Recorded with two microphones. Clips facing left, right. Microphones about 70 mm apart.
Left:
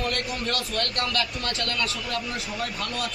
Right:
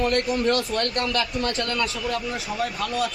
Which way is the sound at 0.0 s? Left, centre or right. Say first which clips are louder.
Right 7 dB; right.